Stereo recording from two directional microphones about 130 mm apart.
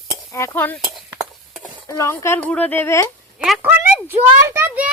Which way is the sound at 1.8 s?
25° left (ahead or behind).